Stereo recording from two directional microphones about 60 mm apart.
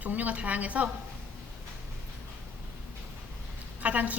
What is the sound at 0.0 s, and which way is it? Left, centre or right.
Speech, right.